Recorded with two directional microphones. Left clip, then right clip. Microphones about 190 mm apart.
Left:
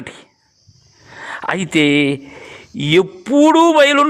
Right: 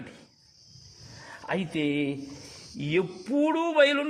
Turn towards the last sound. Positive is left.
turn(degrees=35)  # may be behind; listen again after turning